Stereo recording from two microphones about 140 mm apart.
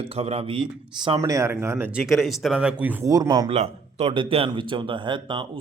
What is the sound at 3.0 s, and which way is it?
Speech, 25° right (ahead or behind).